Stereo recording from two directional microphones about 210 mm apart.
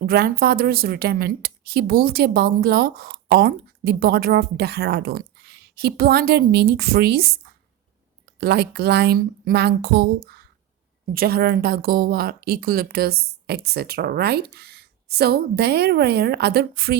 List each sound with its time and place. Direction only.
0.0 s a woman's voice: 45° right (ahead or behind)
8.4 s a woman's voice: 50° right (ahead or behind)